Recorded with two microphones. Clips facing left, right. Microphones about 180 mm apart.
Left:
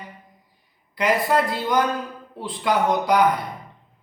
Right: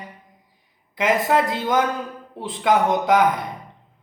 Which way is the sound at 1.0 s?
20° right (ahead or behind).